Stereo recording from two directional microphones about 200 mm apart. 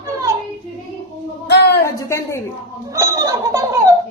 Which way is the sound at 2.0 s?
15° left (ahead or behind).